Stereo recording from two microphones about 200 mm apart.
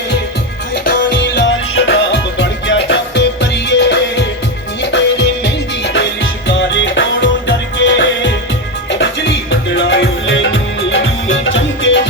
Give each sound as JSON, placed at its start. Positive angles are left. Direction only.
{"t": 0.9, "sound": "music", "side_deg": 55}
{"t": 6.5, "sound": "music", "side_deg": 65}